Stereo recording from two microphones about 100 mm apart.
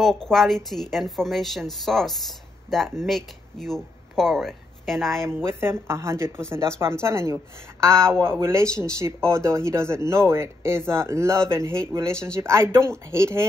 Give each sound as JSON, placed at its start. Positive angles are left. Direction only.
{"t": 0.0, "sound": "a woman's voice", "side_deg": 5}
{"t": 5.2, "sound": "speech", "side_deg": -25}